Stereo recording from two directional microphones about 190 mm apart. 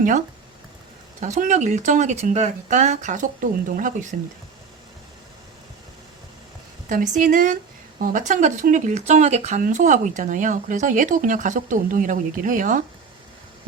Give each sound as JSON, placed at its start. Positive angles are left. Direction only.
{"t": 1.2, "sound": "speech", "side_deg": -40}
{"t": 6.8, "sound": "speech", "side_deg": -40}